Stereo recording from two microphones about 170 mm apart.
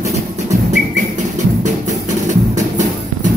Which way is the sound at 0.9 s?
45° right (ahead or behind).